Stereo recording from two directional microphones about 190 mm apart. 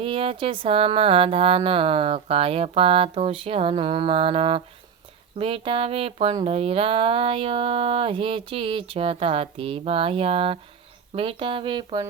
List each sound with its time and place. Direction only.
0.0 s speech: 30° right (ahead or behind)